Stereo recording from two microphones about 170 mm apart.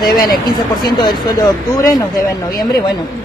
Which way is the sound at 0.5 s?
25° left (ahead or behind).